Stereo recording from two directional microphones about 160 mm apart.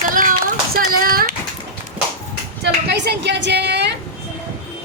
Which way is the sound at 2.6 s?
90° right.